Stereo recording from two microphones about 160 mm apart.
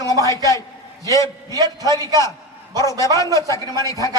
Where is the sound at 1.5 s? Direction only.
25° right (ahead or behind).